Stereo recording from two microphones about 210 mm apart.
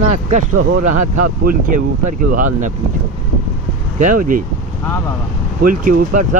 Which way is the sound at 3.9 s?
40° right (ahead or behind).